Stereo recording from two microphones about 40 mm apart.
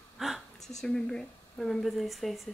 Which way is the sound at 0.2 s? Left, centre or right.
Centre.